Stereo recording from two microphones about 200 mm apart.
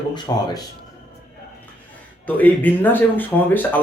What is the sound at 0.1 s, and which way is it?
Speech, 20° left (ahead or behind).